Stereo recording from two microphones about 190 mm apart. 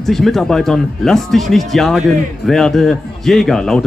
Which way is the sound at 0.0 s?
Centre (ahead or behind).